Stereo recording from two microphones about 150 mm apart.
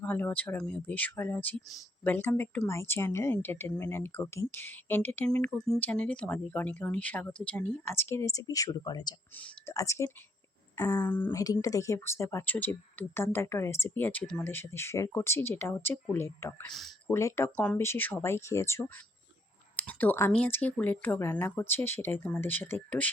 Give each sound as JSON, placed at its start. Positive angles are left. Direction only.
{"t": 0.0, "sound": "speech", "side_deg": 10}
{"t": 9.3, "sound": "speech", "side_deg": 10}
{"t": 11.0, "sound": "speech", "side_deg": 10}